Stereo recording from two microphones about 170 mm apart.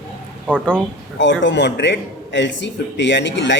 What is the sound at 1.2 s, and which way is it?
A man's voice, 90° left.